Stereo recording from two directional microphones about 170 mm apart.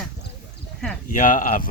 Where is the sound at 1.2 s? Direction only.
50° left (ahead or behind).